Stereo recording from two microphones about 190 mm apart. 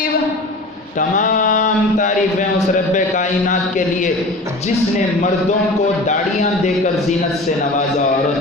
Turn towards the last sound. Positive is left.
turn(degrees=40)  # may be behind; listen again after turning